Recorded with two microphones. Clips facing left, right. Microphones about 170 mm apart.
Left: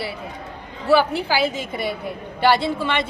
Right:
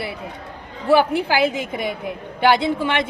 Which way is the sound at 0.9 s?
15° right (ahead or behind).